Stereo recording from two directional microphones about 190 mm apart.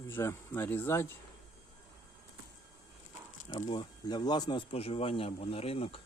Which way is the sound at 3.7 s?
25° left (ahead or behind).